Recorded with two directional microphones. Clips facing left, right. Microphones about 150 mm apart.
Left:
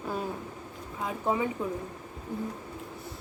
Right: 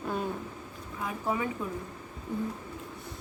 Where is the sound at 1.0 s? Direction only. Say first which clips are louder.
Left 3 dB; 25° left (ahead or behind).